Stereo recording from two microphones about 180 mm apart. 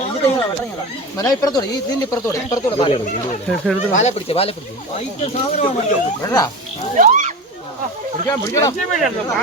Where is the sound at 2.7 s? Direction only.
35° left (ahead or behind).